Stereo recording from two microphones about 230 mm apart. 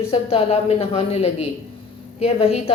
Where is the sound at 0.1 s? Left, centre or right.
Left.